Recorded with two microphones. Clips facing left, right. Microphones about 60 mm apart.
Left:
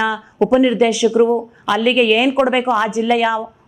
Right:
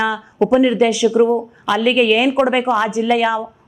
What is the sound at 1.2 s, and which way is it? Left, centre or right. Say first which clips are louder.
A woman's voice: even; left.